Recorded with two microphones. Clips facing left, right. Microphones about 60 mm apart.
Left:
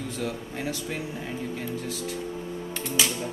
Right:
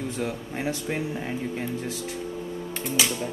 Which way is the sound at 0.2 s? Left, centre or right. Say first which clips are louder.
Right 1 dB; right.